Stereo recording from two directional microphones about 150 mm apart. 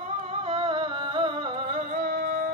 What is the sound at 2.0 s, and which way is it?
Music, 90° right.